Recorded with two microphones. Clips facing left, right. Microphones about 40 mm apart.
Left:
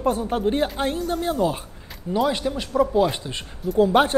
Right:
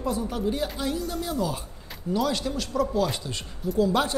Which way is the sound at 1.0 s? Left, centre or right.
Left.